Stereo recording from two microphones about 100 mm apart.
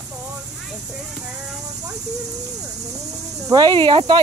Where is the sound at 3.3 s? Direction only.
35° right (ahead or behind).